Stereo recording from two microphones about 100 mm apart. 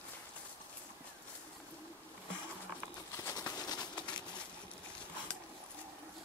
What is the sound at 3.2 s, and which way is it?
Bird, 35° left (ahead or behind).